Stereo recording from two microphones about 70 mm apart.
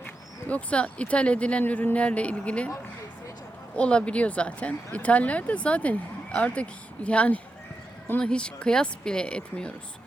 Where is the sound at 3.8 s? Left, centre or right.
Centre.